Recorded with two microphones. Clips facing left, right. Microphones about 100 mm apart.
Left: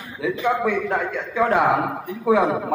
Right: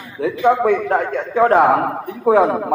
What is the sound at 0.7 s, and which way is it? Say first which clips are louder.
A man's voice: right 6 dB; 45° right (ahead or behind).